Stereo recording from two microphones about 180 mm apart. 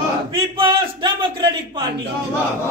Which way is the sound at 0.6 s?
25° right (ahead or behind).